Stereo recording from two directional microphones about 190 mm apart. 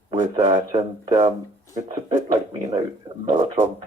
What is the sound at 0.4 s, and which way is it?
Speech, 25° right (ahead or behind).